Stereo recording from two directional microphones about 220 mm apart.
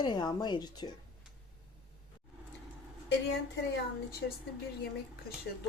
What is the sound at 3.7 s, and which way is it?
Speech, 45° left (ahead or behind).